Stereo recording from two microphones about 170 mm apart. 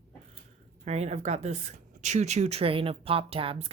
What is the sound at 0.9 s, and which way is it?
Speech, 40° right (ahead or behind).